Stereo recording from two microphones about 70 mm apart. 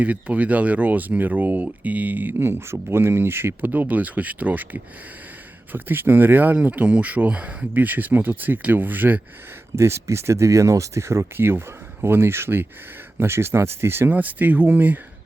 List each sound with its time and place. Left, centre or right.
0.0 s speech: right
9.7 s speech: right
14.1 s speech: right